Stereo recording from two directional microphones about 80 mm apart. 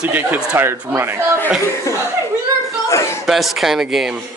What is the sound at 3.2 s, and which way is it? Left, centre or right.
Speech, centre.